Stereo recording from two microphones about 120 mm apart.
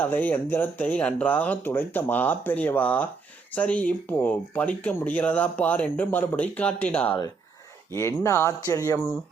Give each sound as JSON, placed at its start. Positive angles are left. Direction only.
{"t": 0.0, "sound": "speech", "side_deg": 15}
{"t": 8.2, "sound": "speech", "side_deg": 25}